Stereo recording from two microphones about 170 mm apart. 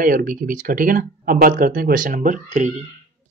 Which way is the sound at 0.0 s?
55° right (ahead or behind).